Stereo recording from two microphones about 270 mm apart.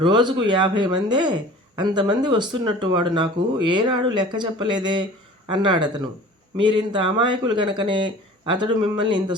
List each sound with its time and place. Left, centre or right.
0.0 s speech: centre